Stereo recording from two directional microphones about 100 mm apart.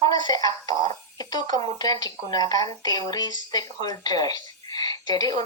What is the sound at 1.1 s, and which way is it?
Speech, 40° left (ahead or behind).